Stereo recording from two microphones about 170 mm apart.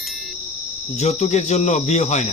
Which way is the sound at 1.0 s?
40° left (ahead or behind).